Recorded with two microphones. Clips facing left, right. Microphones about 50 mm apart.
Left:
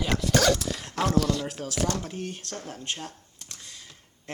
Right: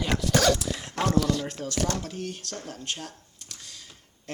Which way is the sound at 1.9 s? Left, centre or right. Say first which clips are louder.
Even; left.